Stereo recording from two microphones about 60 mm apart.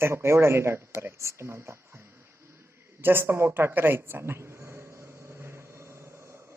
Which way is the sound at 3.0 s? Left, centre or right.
Right.